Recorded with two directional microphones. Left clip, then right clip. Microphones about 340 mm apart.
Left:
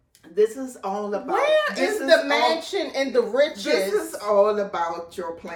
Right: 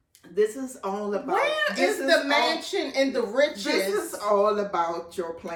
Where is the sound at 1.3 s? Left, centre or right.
Centre.